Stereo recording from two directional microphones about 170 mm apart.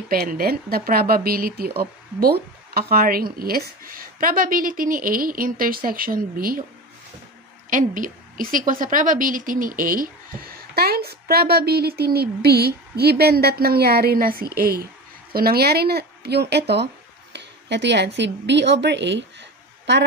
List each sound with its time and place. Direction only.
0.1 s a woman's voice: 60° right (ahead or behind)
7.7 s a woman's voice: 50° right (ahead or behind); by 19.2 s 90° right